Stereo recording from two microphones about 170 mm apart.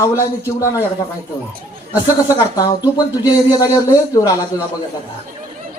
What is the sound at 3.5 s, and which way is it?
Speech, 20° left (ahead or behind).